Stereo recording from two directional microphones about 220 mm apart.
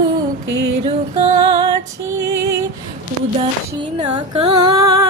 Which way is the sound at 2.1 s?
15° right (ahead or behind).